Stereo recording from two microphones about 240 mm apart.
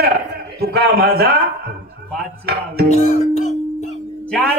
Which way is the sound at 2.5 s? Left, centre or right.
Right.